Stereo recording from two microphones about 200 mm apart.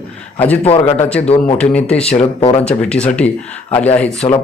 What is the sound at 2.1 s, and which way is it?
Speech, 30° left (ahead or behind).